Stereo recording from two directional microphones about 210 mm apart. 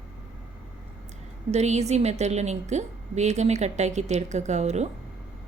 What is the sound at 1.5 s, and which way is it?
A woman's voice, 30° right (ahead or behind).